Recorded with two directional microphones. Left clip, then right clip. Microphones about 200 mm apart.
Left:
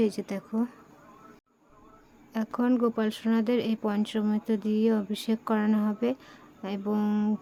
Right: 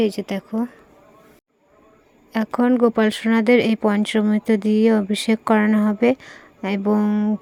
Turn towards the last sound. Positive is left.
turn(degrees=-20)  # may be behind; listen again after turning